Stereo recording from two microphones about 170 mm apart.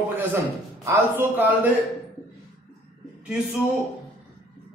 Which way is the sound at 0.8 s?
15° right (ahead or behind).